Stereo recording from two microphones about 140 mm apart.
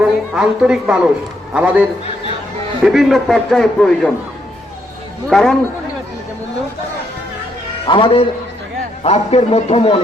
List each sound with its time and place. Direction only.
0.0 s a man's voice: 5° right (ahead or behind)
2.8 s a man's voice: centre (ahead or behind)
5.3 s a man's voice: 5° left (ahead or behind)
7.9 s a man's voice: 35° left (ahead or behind)
9.0 s a man's voice: 50° left (ahead or behind)